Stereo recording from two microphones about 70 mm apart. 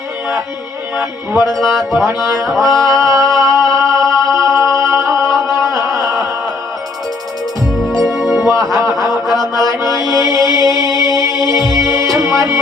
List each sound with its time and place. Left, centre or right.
1.5 s mantra: centre
2.6 s a sound: right
3.7 s music: right
5.7 s a sound: right
8.0 s music: centre
8.4 s music: right
9.4 s mantra: right
11.2 s music: right